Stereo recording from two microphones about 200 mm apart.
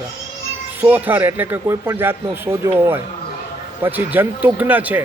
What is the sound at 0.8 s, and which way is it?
Speech, 10° right (ahead or behind).